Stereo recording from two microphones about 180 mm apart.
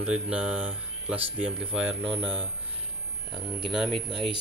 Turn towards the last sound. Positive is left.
turn(degrees=0)  # may be behind; listen again after turning